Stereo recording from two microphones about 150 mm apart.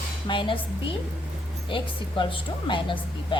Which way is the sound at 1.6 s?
35° left (ahead or behind).